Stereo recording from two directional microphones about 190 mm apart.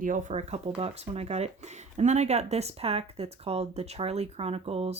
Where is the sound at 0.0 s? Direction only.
40° right (ahead or behind).